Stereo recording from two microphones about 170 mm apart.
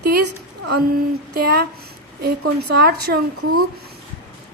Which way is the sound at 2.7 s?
65° right (ahead or behind).